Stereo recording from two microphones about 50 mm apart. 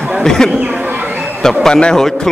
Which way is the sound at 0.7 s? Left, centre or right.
Right.